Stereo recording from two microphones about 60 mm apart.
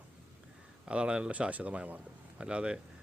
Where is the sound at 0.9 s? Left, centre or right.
Centre.